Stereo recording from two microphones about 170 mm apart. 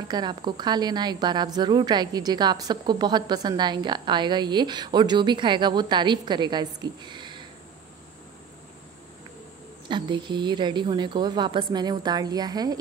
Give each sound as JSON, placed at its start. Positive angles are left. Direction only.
{"t": 0.1, "sound": "a woman's voice", "side_deg": -25}
{"t": 9.8, "sound": "a woman's voice", "side_deg": -25}